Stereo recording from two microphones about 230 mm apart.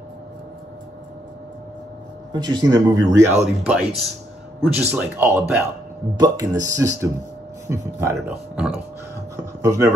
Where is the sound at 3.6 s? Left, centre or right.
Centre.